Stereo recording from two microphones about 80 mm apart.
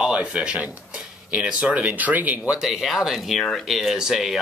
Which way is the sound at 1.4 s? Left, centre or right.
Centre.